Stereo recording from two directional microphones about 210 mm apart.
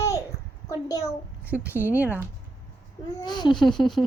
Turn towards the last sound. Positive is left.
turn(degrees=0)  # may be behind; listen again after turning